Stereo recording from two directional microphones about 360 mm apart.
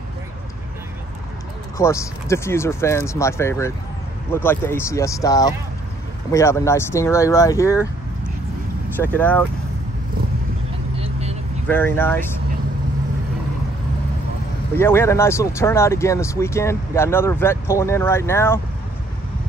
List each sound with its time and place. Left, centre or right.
1.8 s speech: centre
8.9 s speech: centre
11.0 s vehicle: centre
11.6 s speech: centre
14.8 s speech: centre